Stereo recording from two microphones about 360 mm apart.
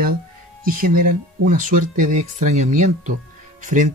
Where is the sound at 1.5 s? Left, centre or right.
Right.